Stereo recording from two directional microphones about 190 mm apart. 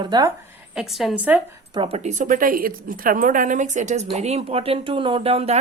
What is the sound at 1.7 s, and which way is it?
Speech, 30° right (ahead or behind).